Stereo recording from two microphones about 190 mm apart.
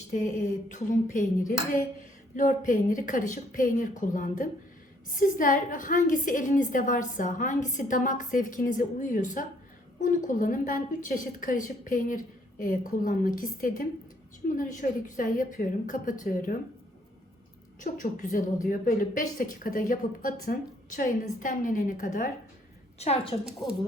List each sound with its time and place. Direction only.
0.1 s a woman's voice: 40° left (ahead or behind)
17.8 s a woman's voice: 45° left (ahead or behind)
23.5 s speech: 5° right (ahead or behind)